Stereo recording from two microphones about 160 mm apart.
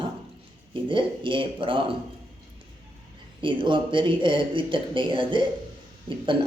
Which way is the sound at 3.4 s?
30° right (ahead or behind).